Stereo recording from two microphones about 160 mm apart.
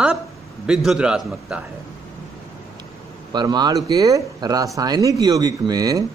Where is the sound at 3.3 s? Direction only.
25° right (ahead or behind).